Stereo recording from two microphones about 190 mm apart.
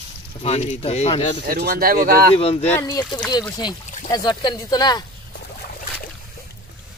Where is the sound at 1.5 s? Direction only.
50° right (ahead or behind).